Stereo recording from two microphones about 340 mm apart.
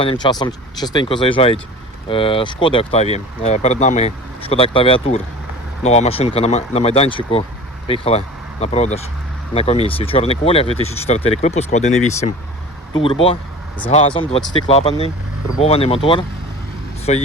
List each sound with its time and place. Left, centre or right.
0.0 s speech: centre